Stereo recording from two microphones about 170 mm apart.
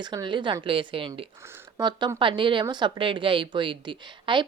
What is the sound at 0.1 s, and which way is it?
A woman's voice, 25° right (ahead or behind).